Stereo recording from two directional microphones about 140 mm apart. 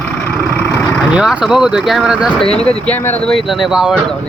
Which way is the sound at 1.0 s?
5° right (ahead or behind).